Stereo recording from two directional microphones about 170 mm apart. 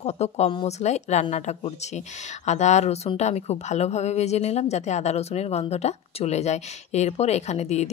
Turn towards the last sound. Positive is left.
turn(degrees=40)  # may be behind; listen again after turning